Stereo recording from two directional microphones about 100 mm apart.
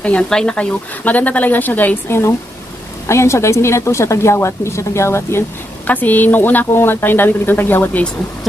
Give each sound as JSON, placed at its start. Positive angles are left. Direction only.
{"t": 0.0, "sound": "a woman's voice", "side_deg": 10}